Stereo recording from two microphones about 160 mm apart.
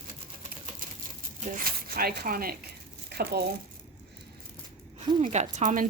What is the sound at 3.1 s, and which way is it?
Speech, 80° right.